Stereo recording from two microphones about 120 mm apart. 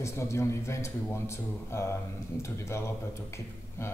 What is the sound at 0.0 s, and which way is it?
Speech, 25° left (ahead or behind).